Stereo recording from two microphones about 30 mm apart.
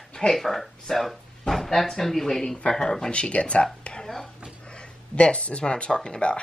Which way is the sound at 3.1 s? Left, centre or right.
Left.